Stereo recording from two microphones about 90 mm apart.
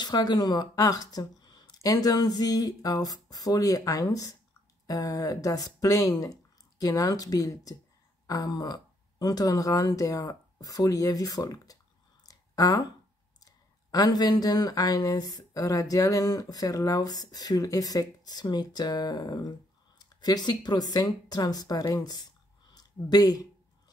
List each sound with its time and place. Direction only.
0.0 s speech: 50° left (ahead or behind)